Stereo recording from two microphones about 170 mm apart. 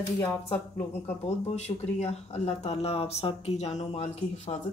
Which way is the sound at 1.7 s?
40° left (ahead or behind).